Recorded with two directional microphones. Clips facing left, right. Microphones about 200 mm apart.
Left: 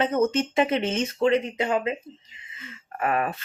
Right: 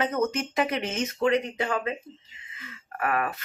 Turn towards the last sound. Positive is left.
turn(degrees=25)  # may be behind; listen again after turning